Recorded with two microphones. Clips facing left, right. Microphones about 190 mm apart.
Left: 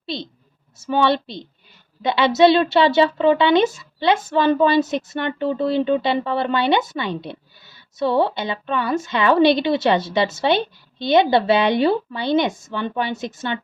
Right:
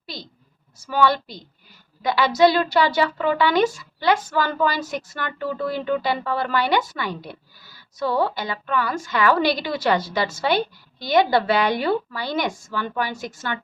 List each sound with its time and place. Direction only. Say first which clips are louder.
0.0 s a woman's voice: left 8 dB; 25° left (ahead or behind)